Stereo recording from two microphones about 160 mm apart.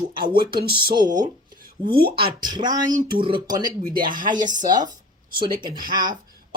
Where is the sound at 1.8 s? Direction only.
75° right (ahead or behind).